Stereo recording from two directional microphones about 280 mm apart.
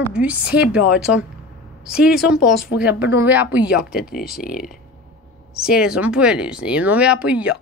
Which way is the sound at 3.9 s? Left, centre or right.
Left.